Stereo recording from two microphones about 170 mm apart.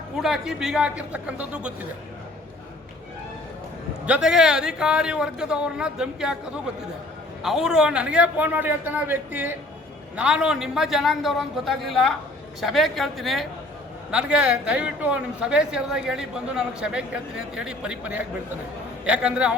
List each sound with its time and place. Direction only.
0.2 s a man's voice: centre (ahead or behind)
4.0 s a man's voice: 5° right (ahead or behind)
7.4 s a man's voice: 5° right (ahead or behind)